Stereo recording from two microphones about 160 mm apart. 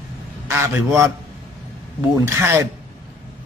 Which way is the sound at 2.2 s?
15° right (ahead or behind).